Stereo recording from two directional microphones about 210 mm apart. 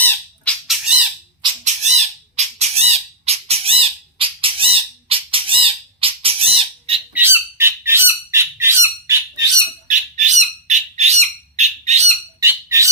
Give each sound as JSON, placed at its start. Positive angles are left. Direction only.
{"t": 0.0, "sound": "squawk", "side_deg": 5}
{"t": 1.6, "sound": "squawk", "side_deg": -30}
{"t": 7.1, "sound": "squawk", "side_deg": -10}
{"t": 9.9, "sound": "bird", "side_deg": -35}
{"t": 12.4, "sound": "squawk", "side_deg": -15}